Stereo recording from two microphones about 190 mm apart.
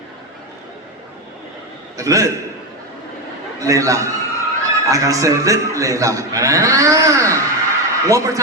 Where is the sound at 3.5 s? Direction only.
15° right (ahead or behind).